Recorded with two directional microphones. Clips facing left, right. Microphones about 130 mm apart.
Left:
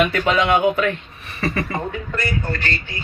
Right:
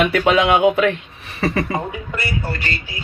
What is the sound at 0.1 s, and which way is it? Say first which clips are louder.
Speech: right 3 dB; 75° right (ahead or behind).